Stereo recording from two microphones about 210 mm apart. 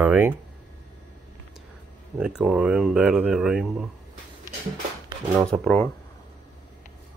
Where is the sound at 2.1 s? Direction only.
5° right (ahead or behind).